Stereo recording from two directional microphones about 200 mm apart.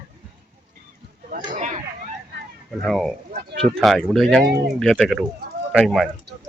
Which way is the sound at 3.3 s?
50° right (ahead or behind).